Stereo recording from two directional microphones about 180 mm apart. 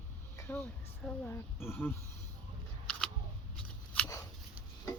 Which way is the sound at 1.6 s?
10° left (ahead or behind).